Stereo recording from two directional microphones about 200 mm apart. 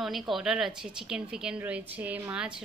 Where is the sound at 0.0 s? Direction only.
Centre (ahead or behind).